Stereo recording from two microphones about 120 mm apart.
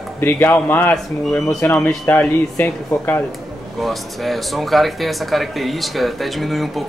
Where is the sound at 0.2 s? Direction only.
15° left (ahead or behind).